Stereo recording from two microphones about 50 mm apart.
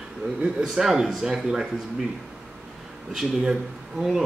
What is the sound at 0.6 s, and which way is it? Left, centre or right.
Speech, centre.